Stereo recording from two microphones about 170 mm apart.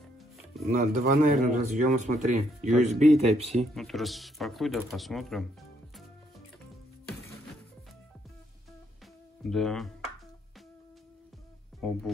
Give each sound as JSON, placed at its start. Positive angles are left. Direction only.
{"t": 0.7, "sound": "speech", "side_deg": -45}
{"t": 3.7, "sound": "a man's voice", "side_deg": 0}
{"t": 9.4, "sound": "speech", "side_deg": 0}
{"t": 11.8, "sound": "a man's voice", "side_deg": 0}